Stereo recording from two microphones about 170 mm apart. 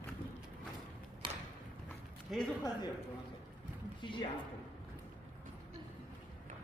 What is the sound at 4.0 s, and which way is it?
Speech, 30° left (ahead or behind).